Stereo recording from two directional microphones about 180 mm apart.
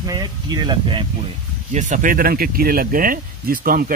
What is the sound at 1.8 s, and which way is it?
Speech, 45° right (ahead or behind).